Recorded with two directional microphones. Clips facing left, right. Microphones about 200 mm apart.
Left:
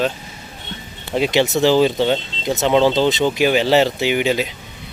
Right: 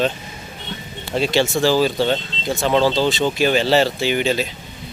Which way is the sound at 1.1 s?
15° left (ahead or behind).